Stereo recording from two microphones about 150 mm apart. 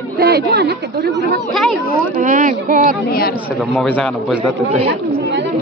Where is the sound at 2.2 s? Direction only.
60° right (ahead or behind).